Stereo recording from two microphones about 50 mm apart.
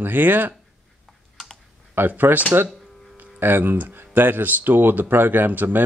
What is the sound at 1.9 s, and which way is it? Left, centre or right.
Speech, right.